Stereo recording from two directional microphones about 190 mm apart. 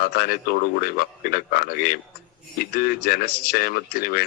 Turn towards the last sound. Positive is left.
turn(degrees=50)  # may be behind; listen again after turning